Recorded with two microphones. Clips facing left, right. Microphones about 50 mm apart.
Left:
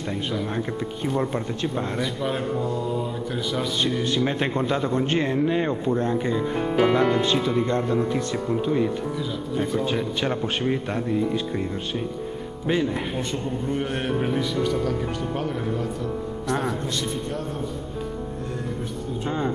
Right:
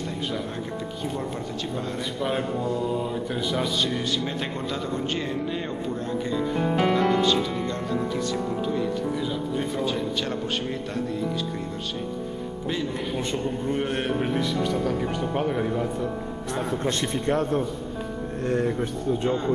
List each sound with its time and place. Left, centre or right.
1.0 s speech: centre
1.3 s speech: left
2.0 s a man's voice: centre
4.0 s speech: left
6.6 s a man's voice: centre
6.9 s speech: centre
9.6 s a man's voice: centre
9.8 s speech: left
12.6 s speech: left
13.3 s a man's voice: centre
17.0 s a man's voice: right